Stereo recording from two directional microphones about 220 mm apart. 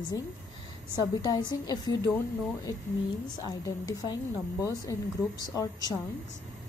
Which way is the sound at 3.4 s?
15° left (ahead or behind).